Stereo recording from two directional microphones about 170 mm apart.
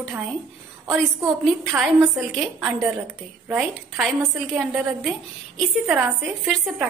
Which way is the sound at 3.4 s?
10° right (ahead or behind).